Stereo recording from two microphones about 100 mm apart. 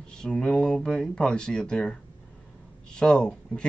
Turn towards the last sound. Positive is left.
turn(degrees=5)  # may be behind; listen again after turning